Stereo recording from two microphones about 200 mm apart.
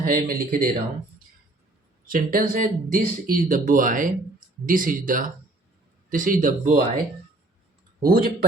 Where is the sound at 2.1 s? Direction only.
45° right (ahead or behind).